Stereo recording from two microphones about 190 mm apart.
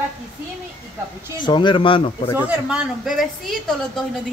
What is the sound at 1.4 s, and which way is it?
Speech, 25° left (ahead or behind).